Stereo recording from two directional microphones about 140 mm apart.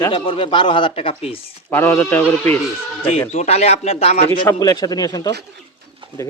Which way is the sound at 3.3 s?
50° left (ahead or behind).